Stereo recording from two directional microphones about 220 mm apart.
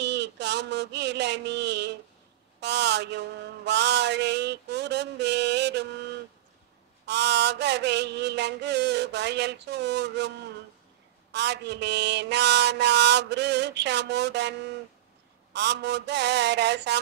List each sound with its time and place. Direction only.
0.0 s a sound: 50° right (ahead or behind)
2.6 s mantra: 50° right (ahead or behind)
7.1 s mantra: 50° right (ahead or behind)
11.3 s mantra: 50° right (ahead or behind)